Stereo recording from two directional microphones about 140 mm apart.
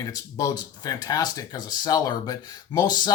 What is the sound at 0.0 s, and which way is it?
Speech, 25° left (ahead or behind).